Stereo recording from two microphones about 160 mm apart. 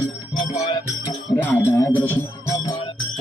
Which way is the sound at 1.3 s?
10° left (ahead or behind).